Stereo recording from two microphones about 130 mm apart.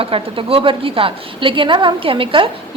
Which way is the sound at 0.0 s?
45° right (ahead or behind).